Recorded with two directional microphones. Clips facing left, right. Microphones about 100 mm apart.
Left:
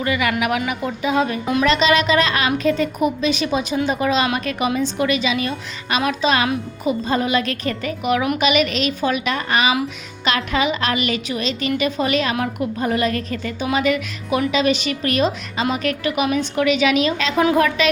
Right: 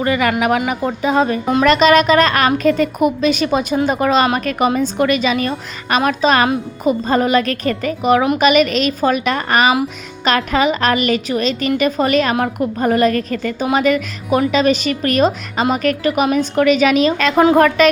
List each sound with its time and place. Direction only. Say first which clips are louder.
0.0 s speech: right 4 dB; 40° right (ahead or behind)
1.6 s a woman's voice: right 6 dB; 50° right (ahead or behind)